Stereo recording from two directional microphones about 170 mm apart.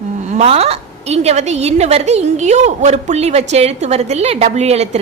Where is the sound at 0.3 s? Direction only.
40° right (ahead or behind).